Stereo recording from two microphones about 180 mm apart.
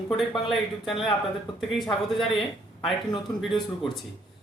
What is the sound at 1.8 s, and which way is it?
Speech, centre (ahead or behind).